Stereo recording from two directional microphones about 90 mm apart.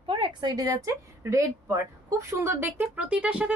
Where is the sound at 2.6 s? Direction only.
15° right (ahead or behind).